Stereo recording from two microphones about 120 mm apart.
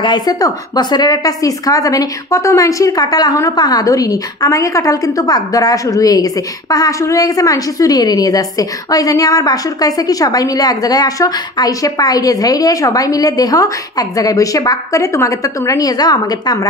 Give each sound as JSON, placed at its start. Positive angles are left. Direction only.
{"t": 0.0, "sound": "a woman's voice", "side_deg": 35}